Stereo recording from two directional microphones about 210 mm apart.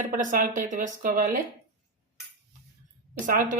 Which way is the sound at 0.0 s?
40° right (ahead or behind).